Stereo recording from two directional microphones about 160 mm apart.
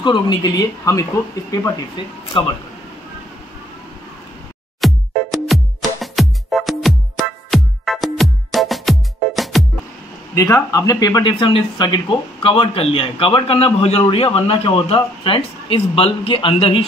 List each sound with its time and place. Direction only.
0.0 s speech: 30° left (ahead or behind)
4.7 s music: centre (ahead or behind)
10.3 s speech: 20° left (ahead or behind)